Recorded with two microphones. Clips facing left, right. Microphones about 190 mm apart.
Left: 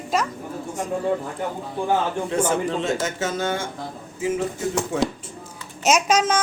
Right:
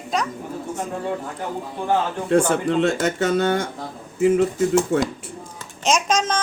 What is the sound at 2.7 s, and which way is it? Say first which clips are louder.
Speech: right 4 dB; 65° right (ahead or behind).